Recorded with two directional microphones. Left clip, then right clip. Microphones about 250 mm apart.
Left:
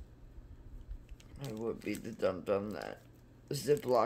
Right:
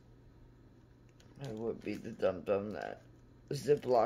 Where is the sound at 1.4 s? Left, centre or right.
Centre.